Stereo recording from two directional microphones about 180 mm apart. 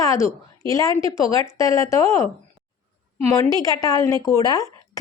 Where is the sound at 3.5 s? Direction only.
20° left (ahead or behind).